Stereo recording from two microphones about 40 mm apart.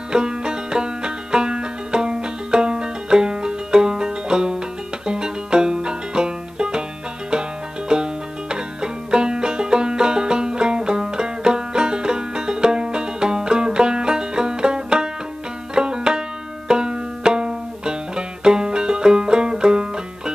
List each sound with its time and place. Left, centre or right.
0.1 s music: right
5.0 s banjo: right
7.9 s banjo: right